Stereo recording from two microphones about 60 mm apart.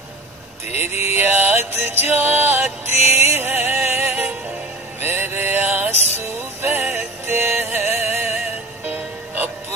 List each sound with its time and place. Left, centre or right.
0.7 s music: right
4.1 s music: right
5.0 s mantra: right
5.9 s music: right